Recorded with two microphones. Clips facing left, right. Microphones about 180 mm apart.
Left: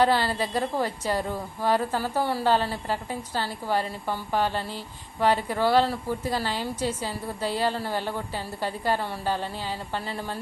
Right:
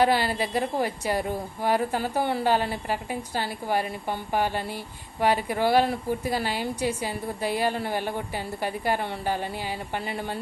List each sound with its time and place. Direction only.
0.0 s a woman's voice: 15° right (ahead or behind)